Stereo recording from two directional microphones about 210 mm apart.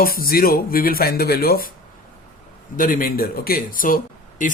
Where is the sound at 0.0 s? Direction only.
45° left (ahead or behind).